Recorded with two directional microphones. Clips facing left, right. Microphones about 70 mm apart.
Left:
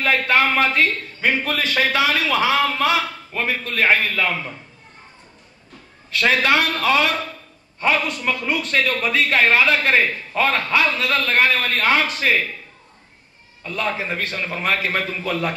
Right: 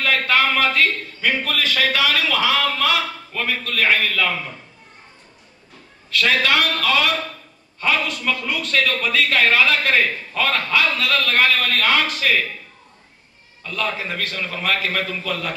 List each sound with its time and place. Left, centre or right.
0.0 s a man's voice: left
6.0 s a man's voice: left
8.5 s a man's voice: left
13.7 s a man's voice: left